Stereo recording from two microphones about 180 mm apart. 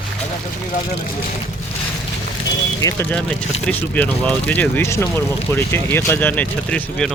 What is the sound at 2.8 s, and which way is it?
Speech, 20° left (ahead or behind).